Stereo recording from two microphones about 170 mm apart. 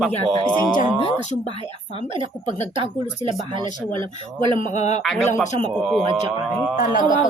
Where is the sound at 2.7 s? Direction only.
30° right (ahead or behind).